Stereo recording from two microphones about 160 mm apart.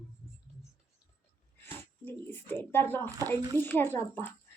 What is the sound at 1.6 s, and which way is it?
A woman's voice, 15° left (ahead or behind).